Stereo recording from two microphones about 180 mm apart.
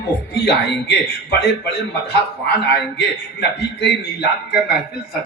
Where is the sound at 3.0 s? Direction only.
65° left (ahead or behind).